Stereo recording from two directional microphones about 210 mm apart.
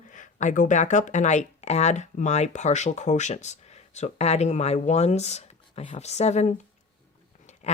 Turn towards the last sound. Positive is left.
turn(degrees=30)  # may be behind; listen again after turning